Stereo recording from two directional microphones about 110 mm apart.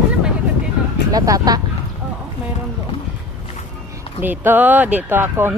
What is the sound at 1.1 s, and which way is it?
Speech, 35° right (ahead or behind).